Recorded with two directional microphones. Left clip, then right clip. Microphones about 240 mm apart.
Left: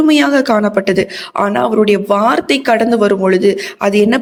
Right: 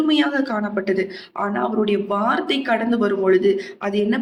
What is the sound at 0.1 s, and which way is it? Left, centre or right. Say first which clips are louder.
Speech: left 9 dB; left.